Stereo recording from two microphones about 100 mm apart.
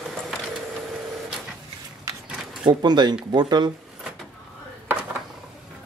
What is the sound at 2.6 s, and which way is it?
Speech, 45° right (ahead or behind).